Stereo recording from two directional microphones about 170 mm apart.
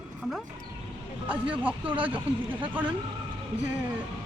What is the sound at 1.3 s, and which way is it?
Speech, 10° right (ahead or behind).